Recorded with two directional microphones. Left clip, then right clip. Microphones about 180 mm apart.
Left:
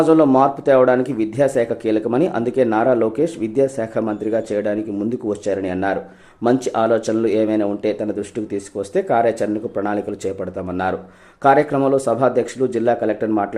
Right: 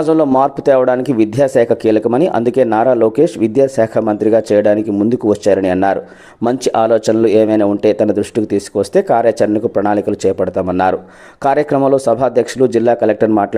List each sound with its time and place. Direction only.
0.0 s speech: 35° right (ahead or behind)